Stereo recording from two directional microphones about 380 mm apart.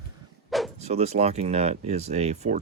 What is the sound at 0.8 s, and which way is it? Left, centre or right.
Speech, centre.